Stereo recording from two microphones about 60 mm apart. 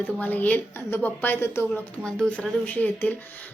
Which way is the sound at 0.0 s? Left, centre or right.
Left.